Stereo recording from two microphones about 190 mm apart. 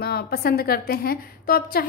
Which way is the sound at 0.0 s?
55° left (ahead or behind).